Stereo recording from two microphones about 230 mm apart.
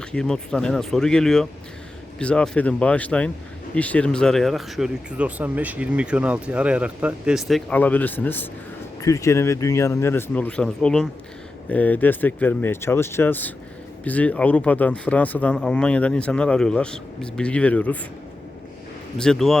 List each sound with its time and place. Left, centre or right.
0.1 s speech: centre
19.2 s speech: centre